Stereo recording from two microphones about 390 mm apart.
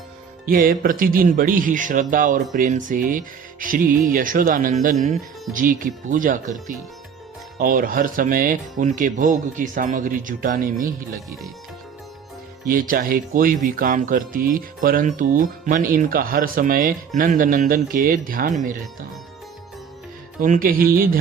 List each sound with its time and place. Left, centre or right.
0.4 s speech: right
12.9 s speech: right
20.4 s speech: right